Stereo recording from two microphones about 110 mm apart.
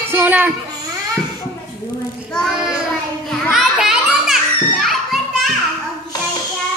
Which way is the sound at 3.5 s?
5° right (ahead or behind).